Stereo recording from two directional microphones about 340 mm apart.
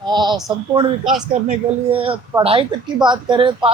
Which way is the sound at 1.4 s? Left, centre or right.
Centre.